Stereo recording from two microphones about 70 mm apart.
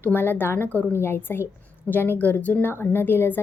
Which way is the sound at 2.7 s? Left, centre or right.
Left.